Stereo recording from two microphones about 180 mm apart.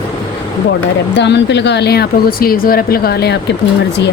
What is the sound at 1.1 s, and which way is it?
Speech, 75° left (ahead or behind).